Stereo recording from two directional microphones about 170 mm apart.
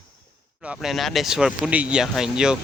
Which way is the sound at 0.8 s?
Centre (ahead or behind).